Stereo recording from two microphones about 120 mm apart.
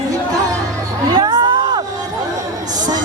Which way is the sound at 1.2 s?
35° right (ahead or behind).